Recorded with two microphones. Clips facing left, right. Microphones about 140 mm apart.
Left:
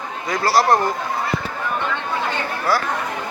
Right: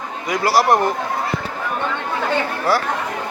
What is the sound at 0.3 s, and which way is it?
Speech, 15° right (ahead or behind).